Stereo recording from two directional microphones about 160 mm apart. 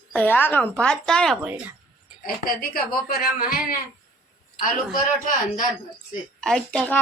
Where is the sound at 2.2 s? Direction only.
65° left (ahead or behind).